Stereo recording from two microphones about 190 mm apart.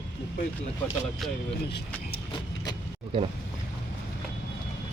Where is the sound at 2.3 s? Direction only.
20° left (ahead or behind).